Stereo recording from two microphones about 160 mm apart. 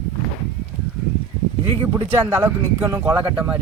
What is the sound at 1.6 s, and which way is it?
Speech, 35° right (ahead or behind).